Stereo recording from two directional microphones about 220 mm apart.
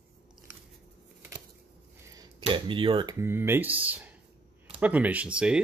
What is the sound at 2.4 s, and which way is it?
Speech, 25° right (ahead or behind).